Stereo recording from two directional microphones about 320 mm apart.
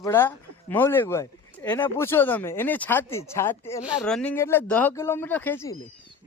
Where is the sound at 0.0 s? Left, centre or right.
Centre.